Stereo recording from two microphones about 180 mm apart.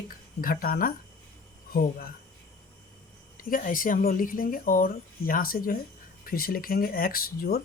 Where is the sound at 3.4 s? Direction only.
50° left (ahead or behind).